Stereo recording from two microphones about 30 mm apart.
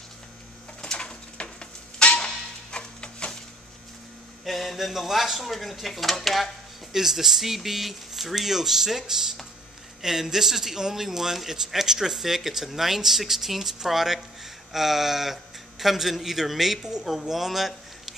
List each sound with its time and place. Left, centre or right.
0.9 s a sound: left
2.2 s music: left
4.5 s speech: centre
6.9 s a man's voice: centre